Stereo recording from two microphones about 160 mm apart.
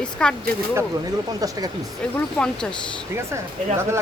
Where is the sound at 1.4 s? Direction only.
25° right (ahead or behind).